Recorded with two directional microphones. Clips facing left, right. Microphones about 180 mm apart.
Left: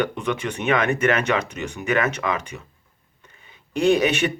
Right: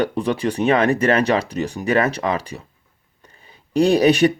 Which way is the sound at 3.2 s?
35° right (ahead or behind).